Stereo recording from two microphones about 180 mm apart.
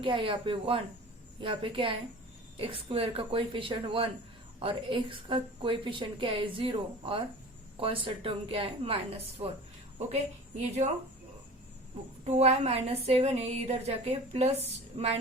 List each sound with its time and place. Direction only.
0.0 s a woman's voice: 30° right (ahead or behind)
10.8 s speech: 45° right (ahead or behind)
12.2 s a woman's voice: 35° right (ahead or behind)